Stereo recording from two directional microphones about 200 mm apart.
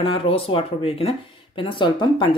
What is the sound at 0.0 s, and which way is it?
A woman's voice, 25° left (ahead or behind).